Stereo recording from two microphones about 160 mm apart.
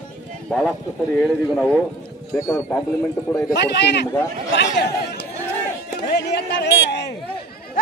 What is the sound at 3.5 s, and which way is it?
Speech, 90° left.